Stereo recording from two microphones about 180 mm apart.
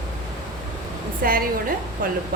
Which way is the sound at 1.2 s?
55° right (ahead or behind).